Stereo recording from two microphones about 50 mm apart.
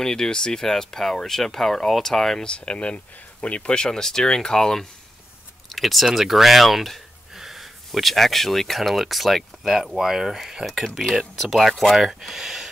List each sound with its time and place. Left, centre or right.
0.0 s speech: centre
2.4 s speech: centre
5.7 s a sound: centre
6.0 s speech: centre